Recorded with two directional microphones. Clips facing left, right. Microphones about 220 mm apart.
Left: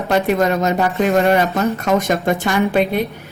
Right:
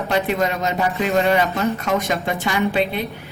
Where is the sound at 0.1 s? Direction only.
45° left (ahead or behind).